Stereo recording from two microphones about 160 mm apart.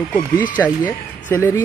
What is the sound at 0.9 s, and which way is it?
Speech, 15° left (ahead or behind).